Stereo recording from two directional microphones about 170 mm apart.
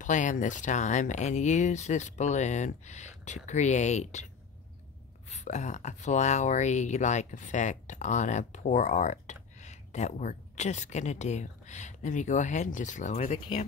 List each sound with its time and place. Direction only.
0.0 s speech: 45° left (ahead or behind)
5.3 s speech: 45° left (ahead or behind)